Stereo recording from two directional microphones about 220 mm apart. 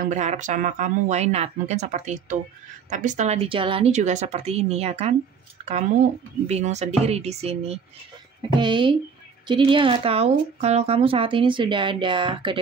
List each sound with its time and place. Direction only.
0.0 s speech: 30° right (ahead or behind)
6.4 s speech: 30° right (ahead or behind)